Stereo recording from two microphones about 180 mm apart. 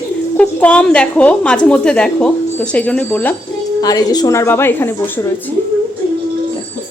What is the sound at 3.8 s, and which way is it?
Speech, 20° left (ahead or behind).